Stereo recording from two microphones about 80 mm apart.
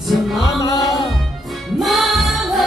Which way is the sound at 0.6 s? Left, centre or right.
Left.